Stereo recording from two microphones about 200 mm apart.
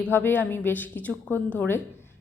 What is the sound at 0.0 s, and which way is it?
A woman's voice, 10° left (ahead or behind).